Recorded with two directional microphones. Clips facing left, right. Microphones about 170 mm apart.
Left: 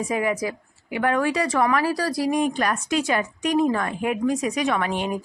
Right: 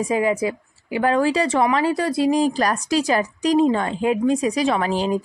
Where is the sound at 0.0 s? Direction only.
30° right (ahead or behind).